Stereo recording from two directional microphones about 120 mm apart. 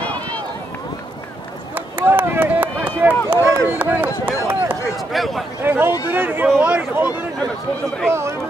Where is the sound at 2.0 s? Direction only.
20° right (ahead or behind).